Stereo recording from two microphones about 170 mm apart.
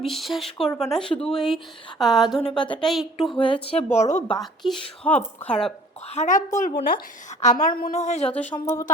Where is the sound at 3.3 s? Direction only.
30° left (ahead or behind).